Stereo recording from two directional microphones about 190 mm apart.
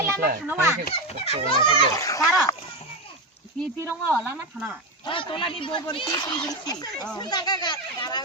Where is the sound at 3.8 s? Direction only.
10° right (ahead or behind).